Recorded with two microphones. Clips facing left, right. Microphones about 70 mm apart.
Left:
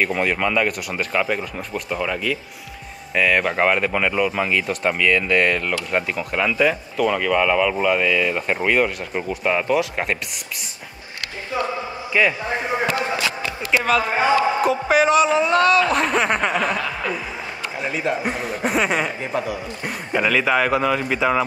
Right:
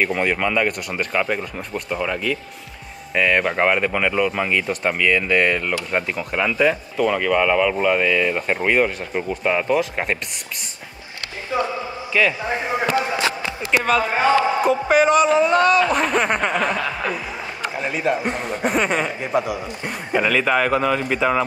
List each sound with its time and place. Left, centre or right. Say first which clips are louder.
0.0 s speech: even; centre
12.1 s a man's voice: even; centre
13.7 s speech: even; centre
17.8 s speech: right 1 dB; centre
19.3 s speech: right 5 dB; centre
20.1 s speech: even; centre